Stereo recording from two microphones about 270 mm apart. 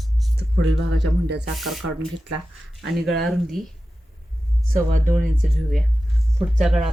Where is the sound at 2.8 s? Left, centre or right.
Centre.